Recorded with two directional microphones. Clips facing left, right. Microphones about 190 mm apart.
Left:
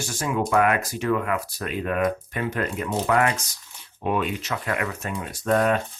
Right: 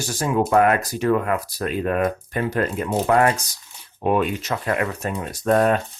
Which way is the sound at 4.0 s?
45° right (ahead or behind).